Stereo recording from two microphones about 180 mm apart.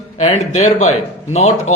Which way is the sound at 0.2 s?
40° left (ahead or behind).